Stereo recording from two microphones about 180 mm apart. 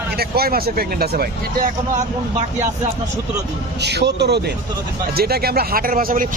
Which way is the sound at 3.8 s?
70° right (ahead or behind).